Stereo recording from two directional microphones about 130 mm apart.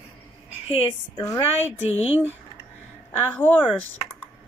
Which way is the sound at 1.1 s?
25° left (ahead or behind).